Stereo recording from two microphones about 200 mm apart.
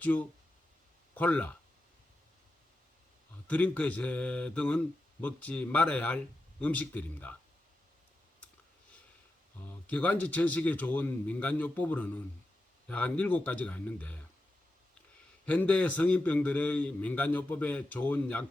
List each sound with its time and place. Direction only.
0.0 s a man's voice: 5° left (ahead or behind)
3.4 s a man's voice: 5° left (ahead or behind)
9.8 s a man's voice: 5° left (ahead or behind)
15.4 s a man's voice: 5° left (ahead or behind)